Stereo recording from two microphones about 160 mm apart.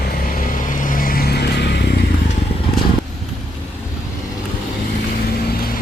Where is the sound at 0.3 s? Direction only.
55° left (ahead or behind); by 2.0 s 90° left.